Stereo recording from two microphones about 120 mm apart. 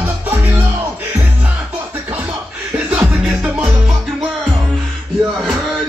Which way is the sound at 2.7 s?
10° right (ahead or behind).